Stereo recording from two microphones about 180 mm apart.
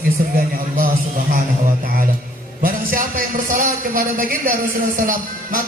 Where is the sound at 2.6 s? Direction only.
50° right (ahead or behind).